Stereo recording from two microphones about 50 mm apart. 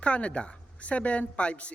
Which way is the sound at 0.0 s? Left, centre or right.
Left.